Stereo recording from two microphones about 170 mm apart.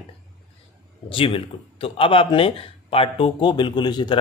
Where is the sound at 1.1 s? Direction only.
30° left (ahead or behind).